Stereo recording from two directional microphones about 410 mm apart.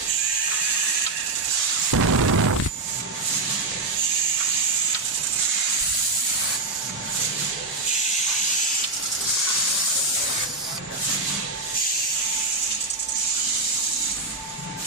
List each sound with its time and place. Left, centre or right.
1.9 s explosion: right